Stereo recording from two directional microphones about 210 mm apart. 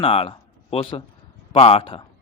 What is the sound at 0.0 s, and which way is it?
A man's voice, 25° left (ahead or behind).